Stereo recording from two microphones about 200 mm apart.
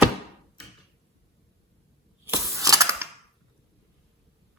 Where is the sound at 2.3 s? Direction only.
15° right (ahead or behind).